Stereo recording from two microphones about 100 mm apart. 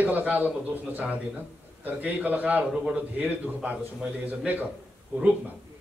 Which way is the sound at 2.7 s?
5° right (ahead or behind).